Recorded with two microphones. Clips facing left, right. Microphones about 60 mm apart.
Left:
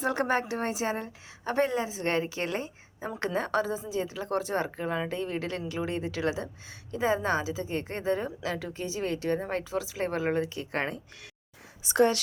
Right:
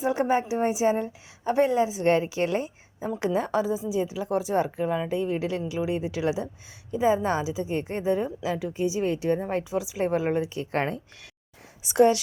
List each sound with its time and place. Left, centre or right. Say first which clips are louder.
0.2 s a woman's voice: right 4 dB; centre; by 11.0 s right
11.9 s a woman's voice: right 4 dB; centre